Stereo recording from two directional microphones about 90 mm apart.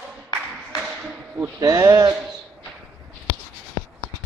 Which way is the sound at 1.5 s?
35° right (ahead or behind).